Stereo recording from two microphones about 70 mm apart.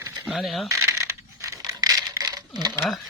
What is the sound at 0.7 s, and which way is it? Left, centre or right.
Coin, right.